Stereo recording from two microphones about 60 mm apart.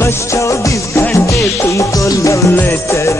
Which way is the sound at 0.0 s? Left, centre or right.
Left.